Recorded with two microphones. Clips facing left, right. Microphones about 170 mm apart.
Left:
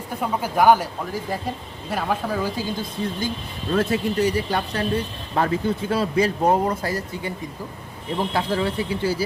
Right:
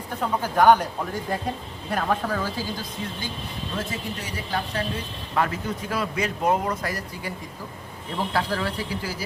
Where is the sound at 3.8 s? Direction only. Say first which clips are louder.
Left 12 dB; 65° left (ahead or behind).